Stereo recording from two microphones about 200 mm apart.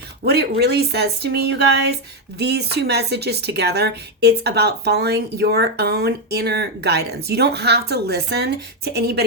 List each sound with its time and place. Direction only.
0.3 s speech: 55° right (ahead or behind)